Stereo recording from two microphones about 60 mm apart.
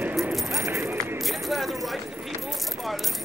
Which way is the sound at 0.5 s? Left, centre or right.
Right.